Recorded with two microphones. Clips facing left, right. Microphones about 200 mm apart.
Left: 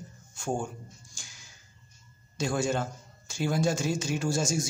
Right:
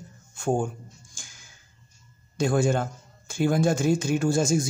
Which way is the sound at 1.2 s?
50° right (ahead or behind).